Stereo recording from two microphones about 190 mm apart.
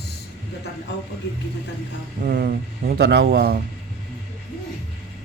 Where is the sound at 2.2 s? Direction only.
55° right (ahead or behind).